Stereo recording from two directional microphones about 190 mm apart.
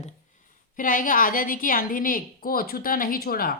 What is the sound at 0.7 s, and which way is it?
A woman's voice, 45° left (ahead or behind).